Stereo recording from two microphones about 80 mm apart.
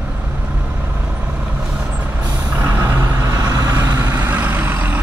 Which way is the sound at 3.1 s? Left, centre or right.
Right.